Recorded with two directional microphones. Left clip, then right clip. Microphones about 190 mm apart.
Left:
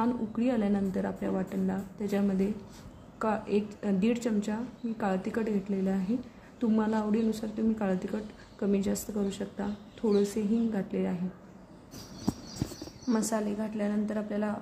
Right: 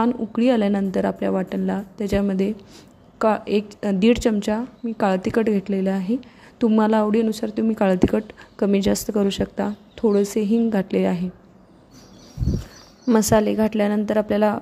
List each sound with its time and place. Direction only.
0.0 s a woman's voice: 45° right (ahead or behind)
13.1 s a woman's voice: 50° right (ahead or behind)